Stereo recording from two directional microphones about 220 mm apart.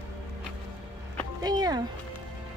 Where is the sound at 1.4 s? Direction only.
20° right (ahead or behind).